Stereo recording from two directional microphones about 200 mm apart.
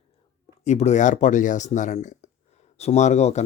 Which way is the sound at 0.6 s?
35° left (ahead or behind).